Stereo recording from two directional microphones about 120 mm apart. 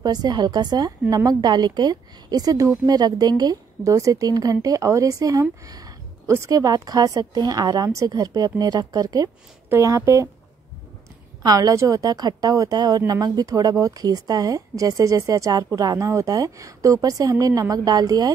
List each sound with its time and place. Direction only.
0.0 s a woman's voice: 35° right (ahead or behind)
11.4 s a woman's voice: 30° right (ahead or behind)